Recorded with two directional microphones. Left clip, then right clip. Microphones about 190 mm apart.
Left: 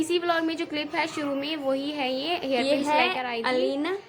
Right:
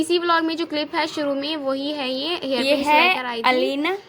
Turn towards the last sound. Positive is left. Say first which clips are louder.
# right 6 dB
turn(degrees=-35)  # may be behind; listen again after turning